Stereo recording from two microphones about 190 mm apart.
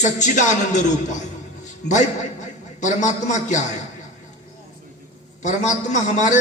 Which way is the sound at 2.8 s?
40° left (ahead or behind).